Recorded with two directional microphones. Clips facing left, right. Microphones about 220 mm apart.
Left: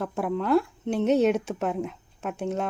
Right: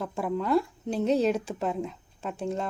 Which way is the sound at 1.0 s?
30° right (ahead or behind).